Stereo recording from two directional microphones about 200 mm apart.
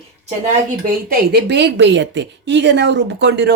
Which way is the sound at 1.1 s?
55° right (ahead or behind).